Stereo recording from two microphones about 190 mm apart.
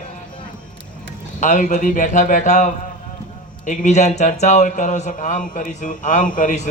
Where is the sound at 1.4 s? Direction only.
40° left (ahead or behind).